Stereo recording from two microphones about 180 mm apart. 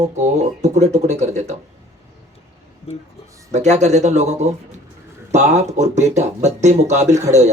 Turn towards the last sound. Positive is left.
turn(degrees=-40)  # may be behind; listen again after turning